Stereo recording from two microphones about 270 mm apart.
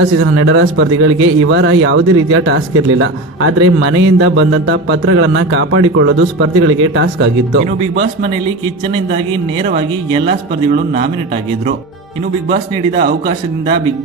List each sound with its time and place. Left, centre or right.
0.0 s a man's voice: right
8.9 s speech: centre
13.0 s a man's voice: right